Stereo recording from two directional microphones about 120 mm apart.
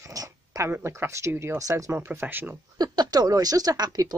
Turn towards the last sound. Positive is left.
turn(degrees=-35)  # may be behind; listen again after turning